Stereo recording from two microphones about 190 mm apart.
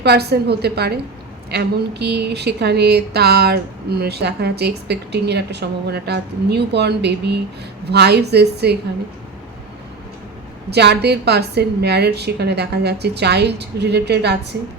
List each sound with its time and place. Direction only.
0.0 s speech: 60° right (ahead or behind)
10.7 s speech: 60° right (ahead or behind)